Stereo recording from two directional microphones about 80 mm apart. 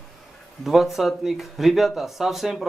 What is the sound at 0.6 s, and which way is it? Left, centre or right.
Speech, centre.